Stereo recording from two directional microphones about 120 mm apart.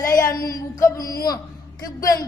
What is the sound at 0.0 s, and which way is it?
A man's voice, 30° left (ahead or behind).